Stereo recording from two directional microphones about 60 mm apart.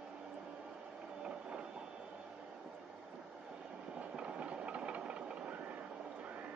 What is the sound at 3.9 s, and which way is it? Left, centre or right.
Train, centre.